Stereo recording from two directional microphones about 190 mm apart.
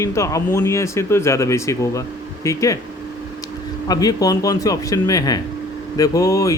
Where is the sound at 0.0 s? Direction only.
15° left (ahead or behind).